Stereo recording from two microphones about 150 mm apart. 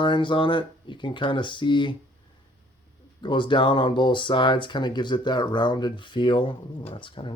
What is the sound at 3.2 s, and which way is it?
Speech, 30° left (ahead or behind).